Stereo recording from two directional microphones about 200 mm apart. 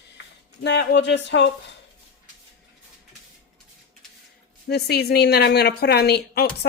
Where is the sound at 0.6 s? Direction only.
60° left (ahead or behind).